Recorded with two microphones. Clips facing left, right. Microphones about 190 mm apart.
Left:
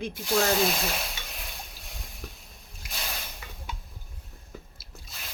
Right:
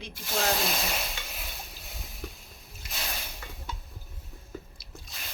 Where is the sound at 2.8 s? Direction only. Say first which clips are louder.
Even; centre (ahead or behind).